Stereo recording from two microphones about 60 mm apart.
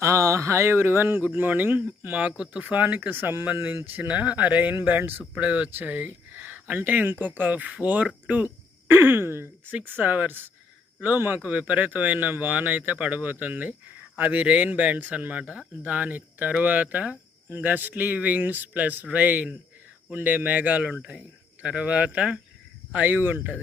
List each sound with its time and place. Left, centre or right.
0.0 s speech: right
5.3 s speech: right
8.4 s speech: right
10.0 s speech: right
23.0 s speech: right